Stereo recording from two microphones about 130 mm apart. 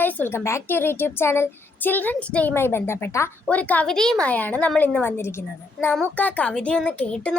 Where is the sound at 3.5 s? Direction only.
10° left (ahead or behind).